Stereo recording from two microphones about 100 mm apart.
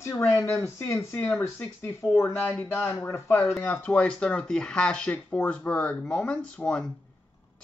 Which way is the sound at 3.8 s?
10° left (ahead or behind).